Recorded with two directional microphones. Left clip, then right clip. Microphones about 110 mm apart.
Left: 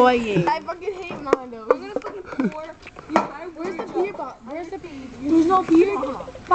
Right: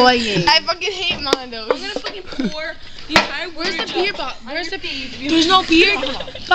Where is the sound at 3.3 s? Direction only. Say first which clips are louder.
Right 7 dB; 40° right (ahead or behind).